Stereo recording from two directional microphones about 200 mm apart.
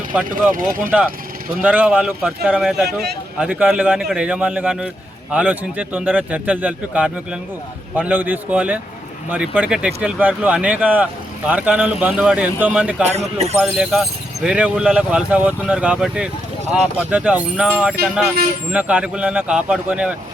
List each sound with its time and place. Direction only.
0.3 s speech: 45° right (ahead or behind)
1.6 s speech: 5° right (ahead or behind)
13.1 s a man's voice: 30° right (ahead or behind)
13.6 s speech: centre (ahead or behind)